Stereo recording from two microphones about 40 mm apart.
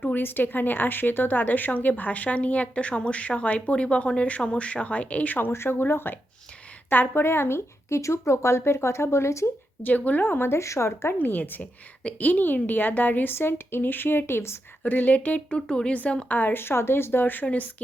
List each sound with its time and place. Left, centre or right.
0.2 s a woman's voice: left
5.5 s speech: left
6.9 s a woman's voice: left
7.3 s speech: left
9.8 s a woman's voice: left
10.2 s speech: left
11.2 s a woman's voice: left
13.3 s speech: left
14.8 s a woman's voice: left
15.4 s speech: left
16.3 s a woman's voice: left
16.6 s speech: left
17.4 s a woman's voice: left